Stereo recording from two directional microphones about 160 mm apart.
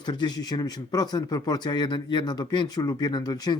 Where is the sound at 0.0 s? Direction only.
25° left (ahead or behind).